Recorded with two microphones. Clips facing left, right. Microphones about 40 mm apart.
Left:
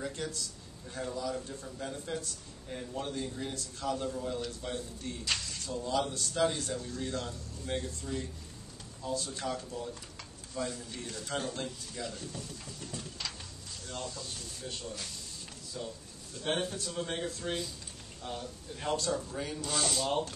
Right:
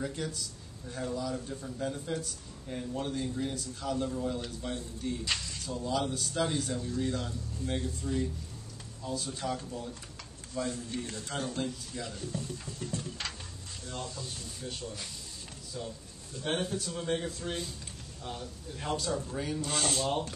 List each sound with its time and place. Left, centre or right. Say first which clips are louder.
0.0 s speech: right 2 dB; centre
10.6 s a man's voice: right 3 dB; right
11.3 s speech: right 2 dB; centre
19.6 s speech: even; right
20.1 s speech: even; centre